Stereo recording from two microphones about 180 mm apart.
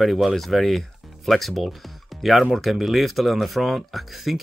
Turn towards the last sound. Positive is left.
turn(degrees=0)  # may be behind; listen again after turning